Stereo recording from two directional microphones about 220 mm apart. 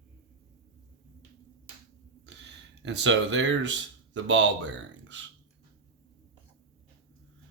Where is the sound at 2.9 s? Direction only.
55° right (ahead or behind).